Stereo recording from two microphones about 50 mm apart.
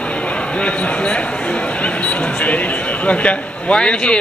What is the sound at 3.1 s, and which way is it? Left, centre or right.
A man's voice, left.